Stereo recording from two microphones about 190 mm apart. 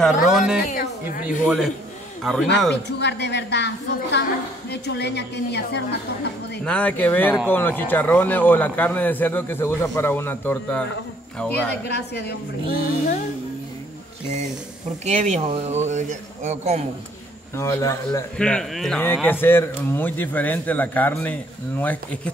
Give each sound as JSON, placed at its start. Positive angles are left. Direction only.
{"t": 0.0, "sound": "speech", "side_deg": 0}
{"t": 2.7, "sound": "a woman's voice", "side_deg": 65}
{"t": 6.6, "sound": "a man's voice", "side_deg": 5}
{"t": 11.9, "sound": "a woman's voice", "side_deg": 60}
{"t": 15.0, "sound": "a man's voice", "side_deg": -35}
{"t": 17.6, "sound": "a man's voice", "side_deg": 15}
{"t": 18.4, "sound": "a man's voice", "side_deg": 5}